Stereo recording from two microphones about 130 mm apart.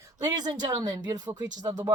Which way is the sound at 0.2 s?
30° right (ahead or behind).